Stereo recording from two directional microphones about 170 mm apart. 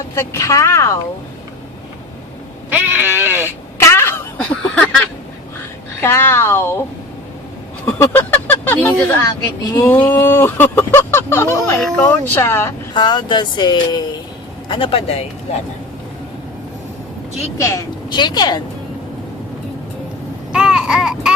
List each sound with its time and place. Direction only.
0.1 s speech: 20° left (ahead or behind)
2.6 s speech: 10° right (ahead or behind)
3.8 s a sound: 15° left (ahead or behind)
6.0 s speech: 15° left (ahead or behind)
7.9 s speech: 15° left (ahead or behind)
12.9 s speech: 25° left (ahead or behind)
17.6 s speech: 20° left (ahead or behind)
20.5 s a sound: 5° right (ahead or behind)